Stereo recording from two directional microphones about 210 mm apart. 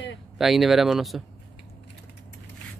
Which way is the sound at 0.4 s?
Centre (ahead or behind).